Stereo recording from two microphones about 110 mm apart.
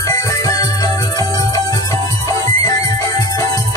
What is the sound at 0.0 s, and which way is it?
Music, 30° left (ahead or behind).